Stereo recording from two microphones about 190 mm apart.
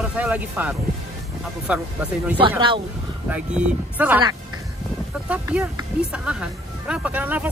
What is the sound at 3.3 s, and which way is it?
Speech, 5° right (ahead or behind).